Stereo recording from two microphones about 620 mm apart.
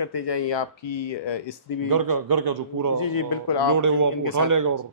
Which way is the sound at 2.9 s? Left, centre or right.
Left.